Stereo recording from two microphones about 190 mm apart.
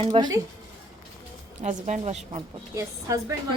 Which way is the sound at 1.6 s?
35° right (ahead or behind).